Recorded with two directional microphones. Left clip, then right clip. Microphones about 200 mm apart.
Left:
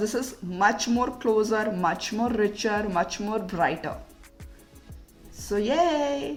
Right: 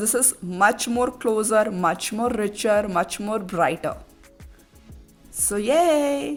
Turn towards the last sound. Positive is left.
turn(degrees=-55)  # may be behind; listen again after turning